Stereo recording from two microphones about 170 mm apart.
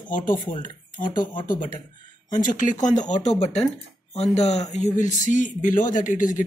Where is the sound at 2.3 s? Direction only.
50° left (ahead or behind).